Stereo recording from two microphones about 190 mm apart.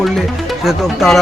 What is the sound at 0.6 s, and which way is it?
Speech, centre (ahead or behind).